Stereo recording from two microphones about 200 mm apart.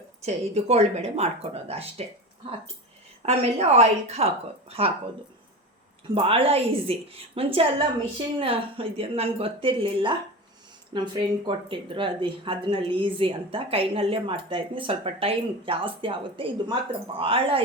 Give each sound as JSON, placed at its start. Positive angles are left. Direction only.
{"t": 0.2, "sound": "speech", "side_deg": -30}
{"t": 3.2, "sound": "speech", "side_deg": -30}
{"t": 6.1, "sound": "speech", "side_deg": -25}